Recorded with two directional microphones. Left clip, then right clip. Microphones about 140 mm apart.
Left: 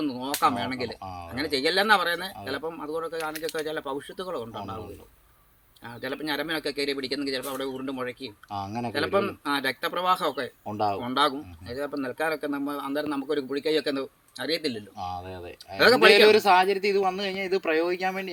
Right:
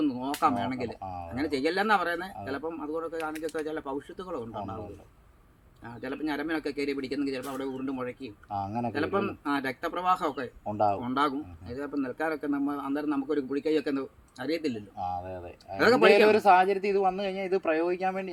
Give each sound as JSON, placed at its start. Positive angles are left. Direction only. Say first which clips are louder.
{"t": 0.0, "sound": "a sound", "louder": "left 2 dB", "side_deg": 0}
{"t": 1.0, "sound": "a sound", "louder": "even", "side_deg": -40}
{"t": 1.3, "sound": "a man's voice", "louder": "left 4 dB", "side_deg": -5}
{"t": 5.8, "sound": "a man's voice", "louder": "left 2 dB", "side_deg": 0}
{"t": 8.4, "sound": "speech", "louder": "right 1 dB", "side_deg": -40}
{"t": 8.9, "sound": "a man's voice", "louder": "left 6 dB", "side_deg": 0}
{"t": 10.7, "sound": "speech", "louder": "right 1 dB", "side_deg": -40}
{"t": 11.0, "sound": "a man's voice", "louder": "left 3 dB", "side_deg": 0}
{"t": 14.9, "sound": "speech", "louder": "right 1 dB", "side_deg": -40}